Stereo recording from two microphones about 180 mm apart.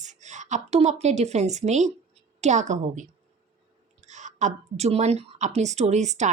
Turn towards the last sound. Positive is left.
turn(degrees=-40)  # may be behind; listen again after turning